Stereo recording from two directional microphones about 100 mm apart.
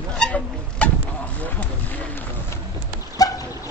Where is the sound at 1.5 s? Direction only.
15° left (ahead or behind).